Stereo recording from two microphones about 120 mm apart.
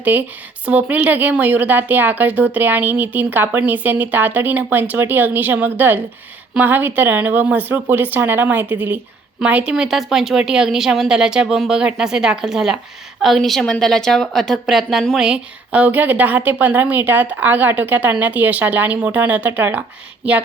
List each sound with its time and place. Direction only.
0.0 s a woman's voice: 15° right (ahead or behind)